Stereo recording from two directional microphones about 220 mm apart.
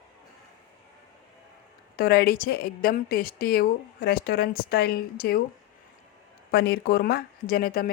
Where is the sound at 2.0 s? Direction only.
45° left (ahead or behind).